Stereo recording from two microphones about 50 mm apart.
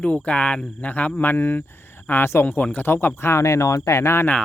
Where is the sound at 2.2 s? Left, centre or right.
Left.